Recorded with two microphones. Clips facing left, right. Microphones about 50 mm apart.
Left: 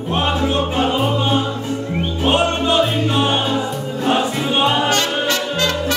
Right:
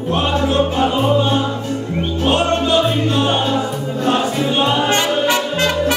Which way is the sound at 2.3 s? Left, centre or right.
Left.